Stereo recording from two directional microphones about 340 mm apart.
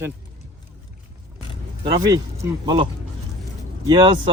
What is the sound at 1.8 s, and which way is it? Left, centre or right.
A man's voice, centre.